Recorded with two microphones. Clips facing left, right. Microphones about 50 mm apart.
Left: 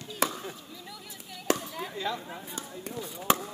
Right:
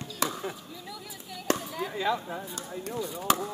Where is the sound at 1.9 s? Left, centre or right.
Centre.